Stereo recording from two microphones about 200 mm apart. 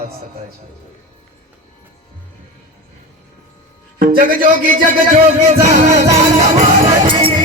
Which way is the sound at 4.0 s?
45° right (ahead or behind).